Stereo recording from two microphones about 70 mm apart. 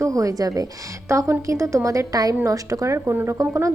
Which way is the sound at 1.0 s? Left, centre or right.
Right.